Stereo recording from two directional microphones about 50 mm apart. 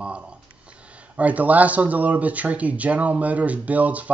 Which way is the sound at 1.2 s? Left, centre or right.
Right.